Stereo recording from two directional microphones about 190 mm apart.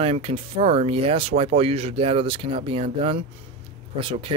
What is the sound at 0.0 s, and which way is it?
Speech, 30° right (ahead or behind).